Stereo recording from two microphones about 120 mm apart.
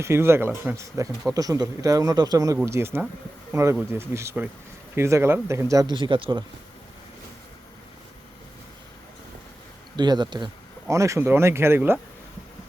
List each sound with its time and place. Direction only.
0.0 s a man's voice: 20° right (ahead or behind)
5.9 s speech: 45° right (ahead or behind)
9.9 s speech: 40° right (ahead or behind)
10.8 s a man's voice: 25° right (ahead or behind)